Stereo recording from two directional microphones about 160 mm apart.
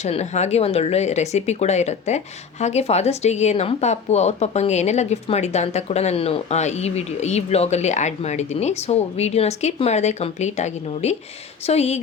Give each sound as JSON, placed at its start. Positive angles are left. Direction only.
{"t": 0.0, "sound": "speech", "side_deg": 45}